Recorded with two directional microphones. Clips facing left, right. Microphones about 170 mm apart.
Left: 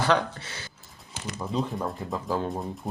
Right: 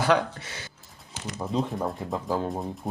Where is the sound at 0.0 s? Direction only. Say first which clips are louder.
Right 1 dB; 15° right (ahead or behind).